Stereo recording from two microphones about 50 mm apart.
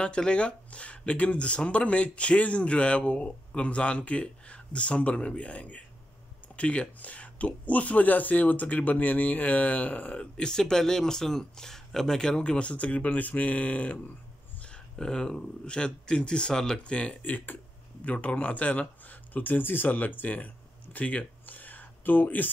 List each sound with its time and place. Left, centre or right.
0.0 s speech: centre
14.7 s speech: centre
17.2 s speech: left